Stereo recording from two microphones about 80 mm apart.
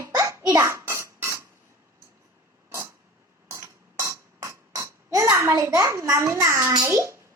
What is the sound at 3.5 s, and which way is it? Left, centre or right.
Music, right.